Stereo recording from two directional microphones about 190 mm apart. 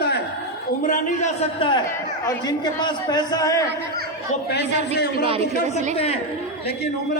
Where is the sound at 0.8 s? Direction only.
45° left (ahead or behind).